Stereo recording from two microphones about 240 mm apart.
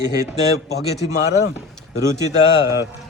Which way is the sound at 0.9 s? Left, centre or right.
Left.